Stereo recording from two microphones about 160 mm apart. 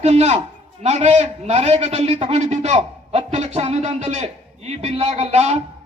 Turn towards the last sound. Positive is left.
turn(degrees=-40)  # may be behind; listen again after turning